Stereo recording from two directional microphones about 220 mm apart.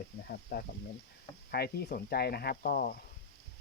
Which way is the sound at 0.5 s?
45° left (ahead or behind).